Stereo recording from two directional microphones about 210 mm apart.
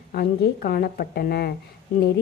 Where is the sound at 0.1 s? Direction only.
45° left (ahead or behind).